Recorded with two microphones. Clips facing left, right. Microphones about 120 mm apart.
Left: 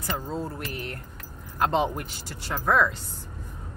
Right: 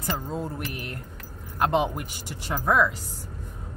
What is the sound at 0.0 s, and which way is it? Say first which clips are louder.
Speech: right 1 dB; 15° right (ahead or behind).